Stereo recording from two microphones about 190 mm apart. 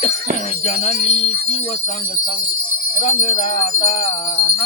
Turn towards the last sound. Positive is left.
turn(degrees=40)  # may be behind; listen again after turning